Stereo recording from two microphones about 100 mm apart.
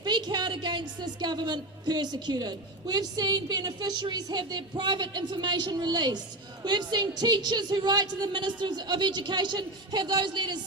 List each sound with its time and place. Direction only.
0.0 s a woman's voice: 45° right (ahead or behind)